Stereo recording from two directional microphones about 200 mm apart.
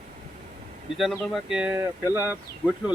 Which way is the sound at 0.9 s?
Centre (ahead or behind).